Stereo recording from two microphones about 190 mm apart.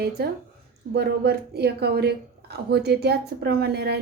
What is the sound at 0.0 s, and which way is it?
A woman's voice, 55° right (ahead or behind).